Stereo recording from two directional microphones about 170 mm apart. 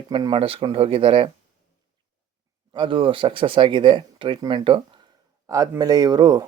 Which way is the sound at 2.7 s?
30° right (ahead or behind).